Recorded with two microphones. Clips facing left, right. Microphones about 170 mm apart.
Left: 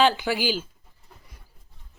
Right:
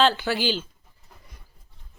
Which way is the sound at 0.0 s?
15° left (ahead or behind).